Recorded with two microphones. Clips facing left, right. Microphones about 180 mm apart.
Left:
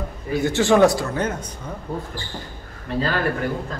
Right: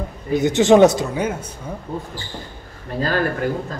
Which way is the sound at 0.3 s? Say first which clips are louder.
Right 4 dB; 20° right (ahead or behind).